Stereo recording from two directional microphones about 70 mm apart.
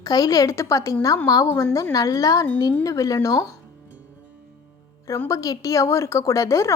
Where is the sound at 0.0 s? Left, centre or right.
Left.